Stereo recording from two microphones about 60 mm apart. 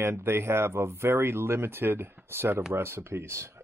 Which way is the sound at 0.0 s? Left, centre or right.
Right.